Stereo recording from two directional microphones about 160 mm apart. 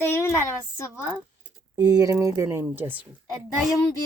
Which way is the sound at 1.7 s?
20° right (ahead or behind).